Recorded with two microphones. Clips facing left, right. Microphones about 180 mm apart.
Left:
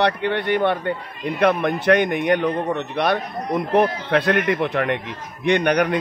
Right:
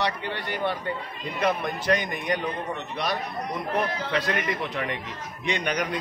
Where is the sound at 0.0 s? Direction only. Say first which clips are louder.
Left 9 dB; 60° left (ahead or behind).